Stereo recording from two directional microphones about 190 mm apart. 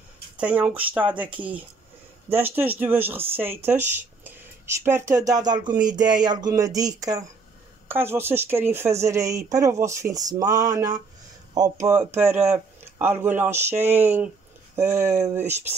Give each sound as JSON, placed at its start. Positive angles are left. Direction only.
{"t": 0.4, "sound": "speech", "side_deg": -5}
{"t": 2.3, "sound": "speech", "side_deg": -10}